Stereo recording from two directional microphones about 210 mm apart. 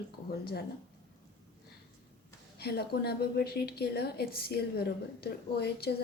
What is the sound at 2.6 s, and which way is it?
A woman's voice, 50° left (ahead or behind).